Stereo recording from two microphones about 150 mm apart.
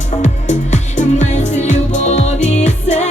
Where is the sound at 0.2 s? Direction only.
55° left (ahead or behind).